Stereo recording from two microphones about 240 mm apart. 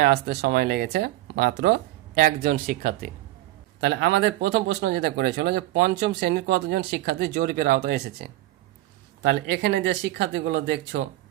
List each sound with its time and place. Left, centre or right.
0.0 s speech: right
3.8 s speech: right